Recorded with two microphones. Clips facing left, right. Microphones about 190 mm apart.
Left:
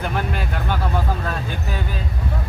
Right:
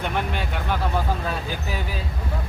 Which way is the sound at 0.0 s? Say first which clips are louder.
Left 2 dB; centre (ahead or behind).